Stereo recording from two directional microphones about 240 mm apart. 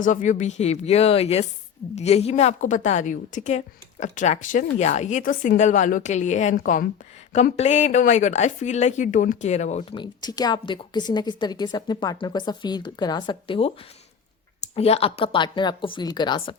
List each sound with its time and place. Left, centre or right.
0.0 s a woman's voice: left